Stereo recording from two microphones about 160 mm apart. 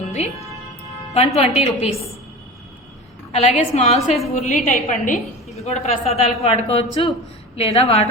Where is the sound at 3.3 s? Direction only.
45° left (ahead or behind).